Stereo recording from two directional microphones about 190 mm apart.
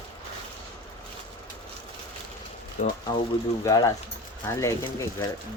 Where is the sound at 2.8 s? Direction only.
35° left (ahead or behind).